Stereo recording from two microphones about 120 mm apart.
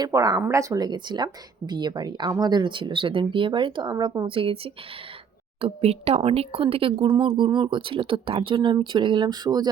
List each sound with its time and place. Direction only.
0.0 s speech: 30° right (ahead or behind)
4.3 s speech: 50° right (ahead or behind); by 9.6 s 35° right (ahead or behind)